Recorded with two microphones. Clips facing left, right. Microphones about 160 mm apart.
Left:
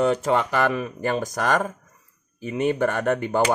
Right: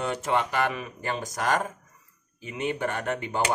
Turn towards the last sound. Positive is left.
turn(degrees=50)  # may be behind; listen again after turning